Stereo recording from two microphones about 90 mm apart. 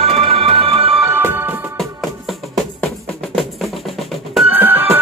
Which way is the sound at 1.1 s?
25° right (ahead or behind).